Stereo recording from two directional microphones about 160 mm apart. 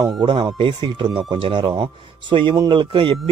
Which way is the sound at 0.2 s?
30° right (ahead or behind).